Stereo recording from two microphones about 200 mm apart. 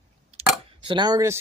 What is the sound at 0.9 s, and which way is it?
Speech, 20° right (ahead or behind).